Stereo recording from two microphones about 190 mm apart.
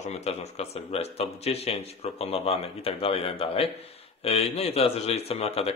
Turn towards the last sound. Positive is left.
turn(degrees=30)  # may be behind; listen again after turning